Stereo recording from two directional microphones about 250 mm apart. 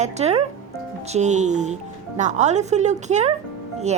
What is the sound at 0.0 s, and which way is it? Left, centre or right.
Speech, right.